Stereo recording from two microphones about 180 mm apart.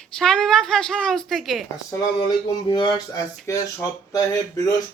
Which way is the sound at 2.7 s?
25° left (ahead or behind).